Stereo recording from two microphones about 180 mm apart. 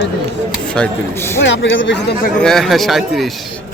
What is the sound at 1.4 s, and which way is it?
Speech, 90° left.